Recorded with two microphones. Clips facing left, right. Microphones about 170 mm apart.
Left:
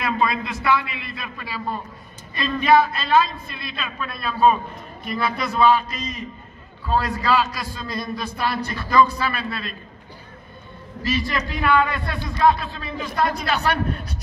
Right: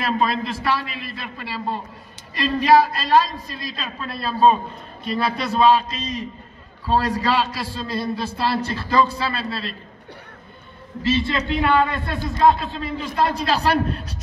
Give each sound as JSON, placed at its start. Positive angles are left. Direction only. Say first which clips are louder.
{"t": 0.2, "sound": "a man's voice", "louder": "right 1 dB", "side_deg": -30}
{"t": 11.1, "sound": "a man's voice", "louder": "right 4 dB", "side_deg": -25}